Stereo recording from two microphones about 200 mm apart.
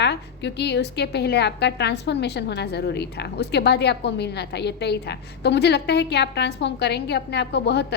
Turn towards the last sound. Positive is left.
turn(degrees=55)  # may be behind; listen again after turning